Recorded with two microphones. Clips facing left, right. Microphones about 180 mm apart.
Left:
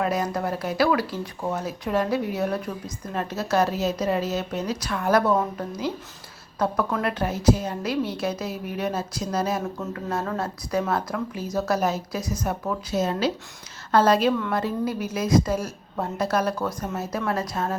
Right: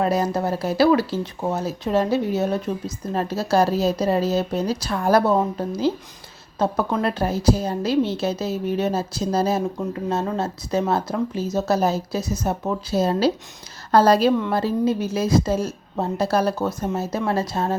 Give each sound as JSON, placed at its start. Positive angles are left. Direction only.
{"t": 0.0, "sound": "a woman's voice", "side_deg": -30}